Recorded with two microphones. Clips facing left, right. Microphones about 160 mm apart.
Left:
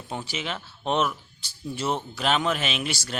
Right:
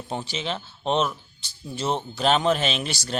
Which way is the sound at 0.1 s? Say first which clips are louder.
Right 2 dB; 25° right (ahead or behind).